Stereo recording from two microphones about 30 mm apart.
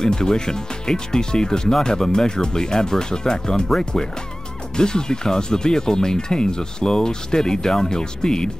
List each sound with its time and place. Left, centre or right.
0.0 s speech: left
4.7 s speech: left